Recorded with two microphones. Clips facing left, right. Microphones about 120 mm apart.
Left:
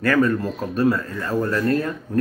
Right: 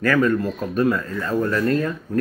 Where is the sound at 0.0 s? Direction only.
35° left (ahead or behind).